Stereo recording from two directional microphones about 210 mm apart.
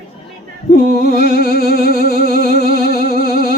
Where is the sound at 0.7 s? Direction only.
45° left (ahead or behind).